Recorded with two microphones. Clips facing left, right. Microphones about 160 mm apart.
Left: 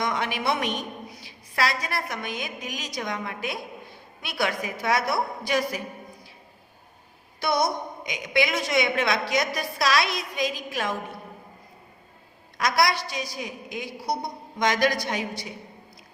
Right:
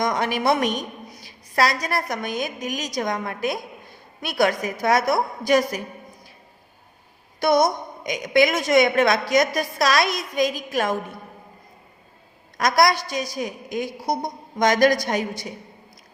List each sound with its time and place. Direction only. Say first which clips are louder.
0.0 s a woman's voice: right 5 dB; 40° right (ahead or behind)
7.3 s a woman's voice: right 6 dB; 45° right (ahead or behind)
12.5 s a woman's voice: right 5 dB; 45° right (ahead or behind)